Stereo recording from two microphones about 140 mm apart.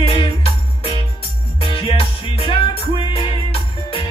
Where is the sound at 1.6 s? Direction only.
40° left (ahead or behind).